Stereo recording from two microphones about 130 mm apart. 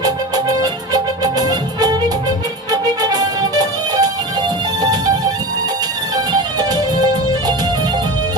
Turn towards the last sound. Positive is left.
turn(degrees=-30)  # may be behind; listen again after turning